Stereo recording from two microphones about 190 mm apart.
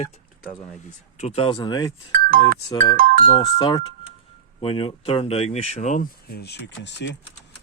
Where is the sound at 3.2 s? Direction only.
30° left (ahead or behind).